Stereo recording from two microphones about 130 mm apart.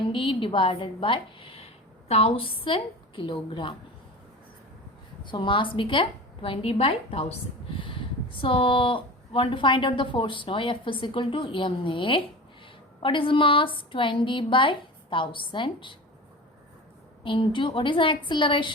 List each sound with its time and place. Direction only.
0.1 s a woman's voice: 40° left (ahead or behind)
5.2 s speech: 40° left (ahead or behind)
17.2 s speech: 40° left (ahead or behind)